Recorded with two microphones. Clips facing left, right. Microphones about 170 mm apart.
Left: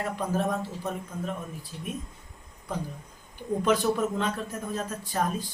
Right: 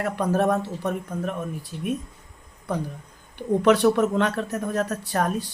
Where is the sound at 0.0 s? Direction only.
70° right (ahead or behind).